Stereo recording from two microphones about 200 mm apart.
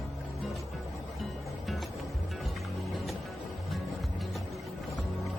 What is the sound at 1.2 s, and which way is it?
Music, centre (ahead or behind).